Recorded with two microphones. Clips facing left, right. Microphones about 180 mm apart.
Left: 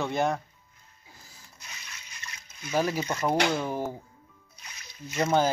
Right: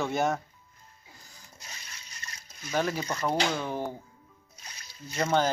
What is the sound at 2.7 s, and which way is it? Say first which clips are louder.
Speech: left 2 dB; 10° left (ahead or behind).